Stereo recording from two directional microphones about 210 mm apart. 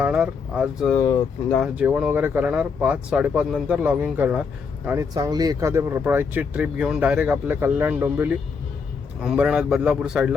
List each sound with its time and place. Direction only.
0.0 s speech: 5° right (ahead or behind)
0.9 s speech: 15° left (ahead or behind)
1.5 s speech: 5° right (ahead or behind)
4.9 s speech: 15° right (ahead or behind)